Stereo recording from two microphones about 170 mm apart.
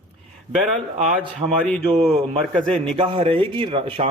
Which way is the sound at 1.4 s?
30° right (ahead or behind).